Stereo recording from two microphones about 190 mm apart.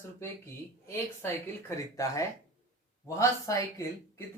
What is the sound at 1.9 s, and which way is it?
A man's voice, 15° left (ahead or behind).